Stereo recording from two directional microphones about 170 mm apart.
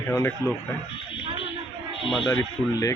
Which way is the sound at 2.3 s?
20° left (ahead or behind).